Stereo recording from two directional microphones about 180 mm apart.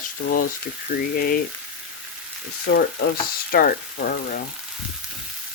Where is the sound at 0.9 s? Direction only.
55° left (ahead or behind).